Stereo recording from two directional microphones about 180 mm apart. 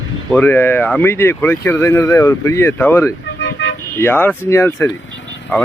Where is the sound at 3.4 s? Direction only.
90° left.